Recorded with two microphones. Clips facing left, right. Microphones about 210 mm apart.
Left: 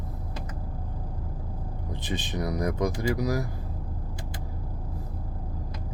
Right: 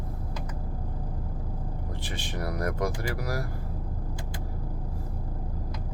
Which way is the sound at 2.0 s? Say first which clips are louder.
Left 5 dB; 20° left (ahead or behind).